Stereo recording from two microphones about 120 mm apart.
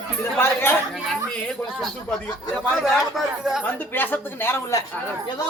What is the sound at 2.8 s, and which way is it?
Speech, centre (ahead or behind).